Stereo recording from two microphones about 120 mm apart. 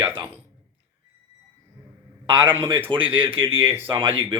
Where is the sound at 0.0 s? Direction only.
15° right (ahead or behind).